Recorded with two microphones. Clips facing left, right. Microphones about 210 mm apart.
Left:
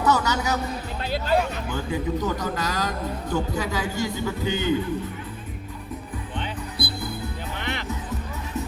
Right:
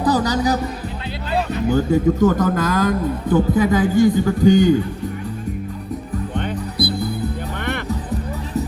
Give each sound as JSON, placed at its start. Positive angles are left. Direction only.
{"t": 0.0, "sound": "music", "side_deg": -35}
{"t": 1.6, "sound": "a man's voice", "side_deg": -40}